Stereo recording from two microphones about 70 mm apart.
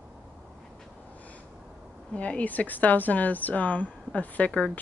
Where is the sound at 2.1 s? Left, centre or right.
Centre.